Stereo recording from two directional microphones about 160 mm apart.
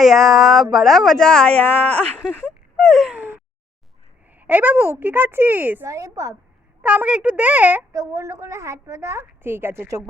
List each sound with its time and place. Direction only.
0.0 s speech: centre (ahead or behind)
2.7 s a sound: centre (ahead or behind)
4.4 s a woman's voice: 10° right (ahead or behind)
6.8 s a woman's voice: 10° right (ahead or behind)